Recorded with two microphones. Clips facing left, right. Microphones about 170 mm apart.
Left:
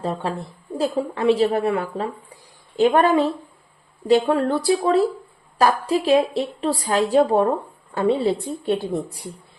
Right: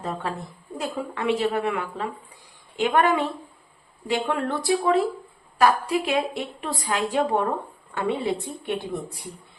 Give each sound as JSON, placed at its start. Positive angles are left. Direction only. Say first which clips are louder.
{"t": 0.0, "sound": "a woman's voice", "louder": "left 4 dB", "side_deg": 30}